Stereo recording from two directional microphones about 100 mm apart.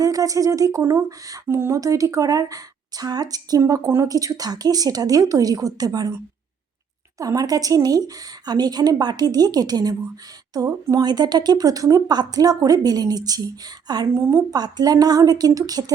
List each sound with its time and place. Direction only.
0.0 s a woman's voice: 35° right (ahead or behind)
7.2 s speech: 35° right (ahead or behind)
14.1 s a woman's voice: 25° right (ahead or behind)
14.5 s speech: 40° right (ahead or behind)